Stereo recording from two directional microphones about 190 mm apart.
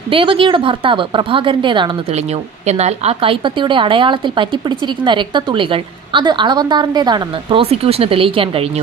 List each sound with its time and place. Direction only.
0.1 s a woman's voice: 25° right (ahead or behind)